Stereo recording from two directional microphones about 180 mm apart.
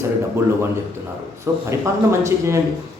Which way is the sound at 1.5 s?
15° right (ahead or behind).